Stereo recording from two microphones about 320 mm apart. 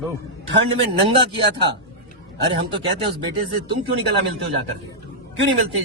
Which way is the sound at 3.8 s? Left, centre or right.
Right.